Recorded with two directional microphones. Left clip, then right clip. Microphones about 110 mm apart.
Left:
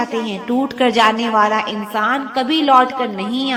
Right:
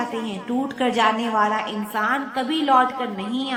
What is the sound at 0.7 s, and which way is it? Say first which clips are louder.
A woman's voice: left 6 dB; 25° left (ahead or behind).